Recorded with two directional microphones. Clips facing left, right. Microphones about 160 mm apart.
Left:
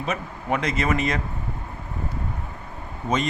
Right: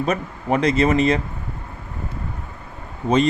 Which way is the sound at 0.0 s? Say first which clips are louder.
Right 6 dB; 40° right (ahead or behind).